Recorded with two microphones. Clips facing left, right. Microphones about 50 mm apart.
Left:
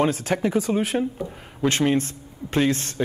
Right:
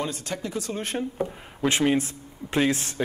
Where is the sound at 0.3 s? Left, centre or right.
Left.